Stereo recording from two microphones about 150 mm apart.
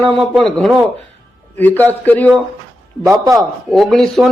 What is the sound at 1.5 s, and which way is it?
Speech, 10° left (ahead or behind).